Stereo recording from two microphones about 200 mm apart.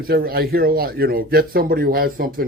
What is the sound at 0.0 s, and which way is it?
Speech, 50° right (ahead or behind).